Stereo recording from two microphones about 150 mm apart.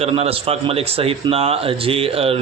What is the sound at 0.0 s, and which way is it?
A man's voice, 40° right (ahead or behind).